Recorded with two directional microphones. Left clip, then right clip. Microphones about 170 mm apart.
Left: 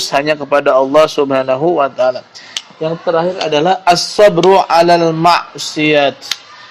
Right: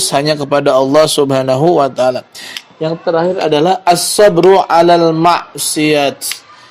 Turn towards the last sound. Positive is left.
turn(degrees=-45)  # may be behind; listen again after turning